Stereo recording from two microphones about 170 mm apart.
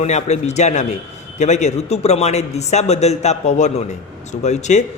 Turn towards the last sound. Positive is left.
turn(degrees=45)  # may be behind; listen again after turning